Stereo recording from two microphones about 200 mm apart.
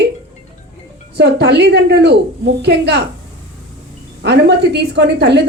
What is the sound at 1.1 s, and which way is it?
A woman's voice, 55° right (ahead or behind).